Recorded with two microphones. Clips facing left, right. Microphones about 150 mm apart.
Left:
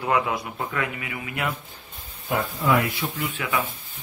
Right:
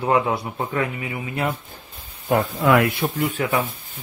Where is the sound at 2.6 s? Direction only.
60° right (ahead or behind).